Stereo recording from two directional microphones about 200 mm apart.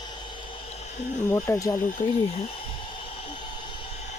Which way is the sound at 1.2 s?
15° left (ahead or behind).